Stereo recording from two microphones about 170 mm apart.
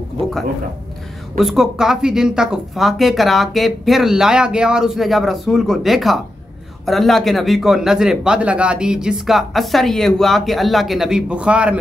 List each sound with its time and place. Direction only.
0.2 s speech: 35° right (ahead or behind)
1.4 s a man's voice: centre (ahead or behind)